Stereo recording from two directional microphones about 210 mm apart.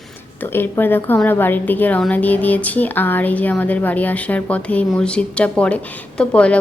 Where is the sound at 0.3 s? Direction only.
10° left (ahead or behind).